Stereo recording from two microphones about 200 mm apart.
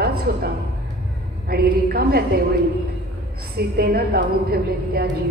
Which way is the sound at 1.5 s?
50° right (ahead or behind).